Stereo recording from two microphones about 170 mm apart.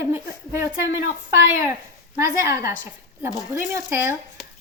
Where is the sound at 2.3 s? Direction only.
15° right (ahead or behind).